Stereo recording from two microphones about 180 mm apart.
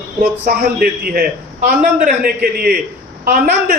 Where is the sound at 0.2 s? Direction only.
50° right (ahead or behind).